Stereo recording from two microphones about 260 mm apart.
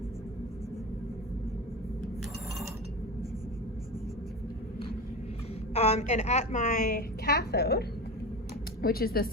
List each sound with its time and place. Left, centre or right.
5.7 s a woman's voice: left